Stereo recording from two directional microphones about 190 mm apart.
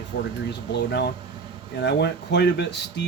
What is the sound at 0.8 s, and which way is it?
Speech, 60° left (ahead or behind).